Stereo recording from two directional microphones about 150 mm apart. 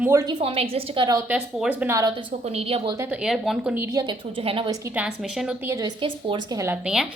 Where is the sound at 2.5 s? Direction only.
40° right (ahead or behind).